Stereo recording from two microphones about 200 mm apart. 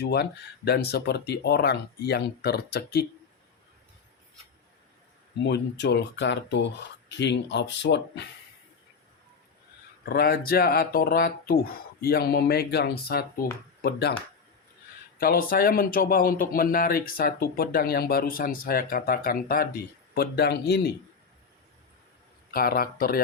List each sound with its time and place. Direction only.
0.0 s speech: 55° left (ahead or behind)
5.4 s speech: 60° left (ahead or behind)
10.1 s speech: 50° left (ahead or behind)
15.2 s speech: 45° left (ahead or behind)
22.5 s speech: 45° left (ahead or behind)